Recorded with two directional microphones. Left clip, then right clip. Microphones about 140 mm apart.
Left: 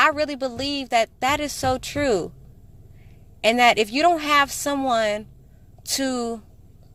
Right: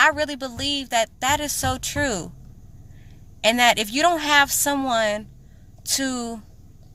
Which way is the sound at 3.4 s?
30° left (ahead or behind).